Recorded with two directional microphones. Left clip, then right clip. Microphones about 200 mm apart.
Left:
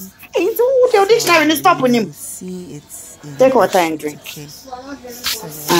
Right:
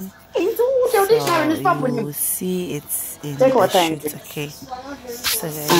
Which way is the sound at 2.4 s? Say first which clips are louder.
Right 8 dB; 15° right (ahead or behind).